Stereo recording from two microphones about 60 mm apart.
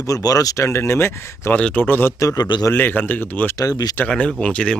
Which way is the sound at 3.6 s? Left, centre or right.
Left.